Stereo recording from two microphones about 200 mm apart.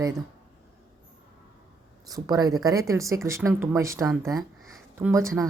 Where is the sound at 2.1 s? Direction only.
20° right (ahead or behind).